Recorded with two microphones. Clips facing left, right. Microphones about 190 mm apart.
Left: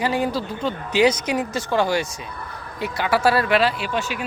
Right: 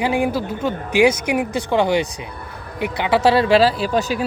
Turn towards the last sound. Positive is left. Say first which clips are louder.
# right 6 dB
turn(degrees=-40)  # may be behind; listen again after turning